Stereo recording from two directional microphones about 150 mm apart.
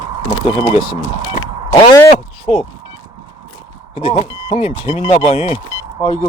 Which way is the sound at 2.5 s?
45° left (ahead or behind).